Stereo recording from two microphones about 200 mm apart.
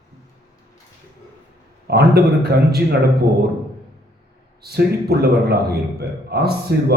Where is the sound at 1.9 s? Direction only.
55° right (ahead or behind).